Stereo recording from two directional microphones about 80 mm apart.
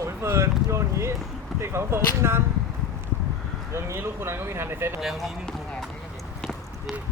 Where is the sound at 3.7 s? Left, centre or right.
Right.